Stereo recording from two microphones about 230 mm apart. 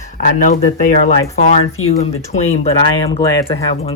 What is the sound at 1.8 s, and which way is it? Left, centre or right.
Speech, left.